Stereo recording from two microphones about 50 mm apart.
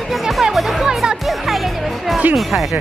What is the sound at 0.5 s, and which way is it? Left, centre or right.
Music, centre.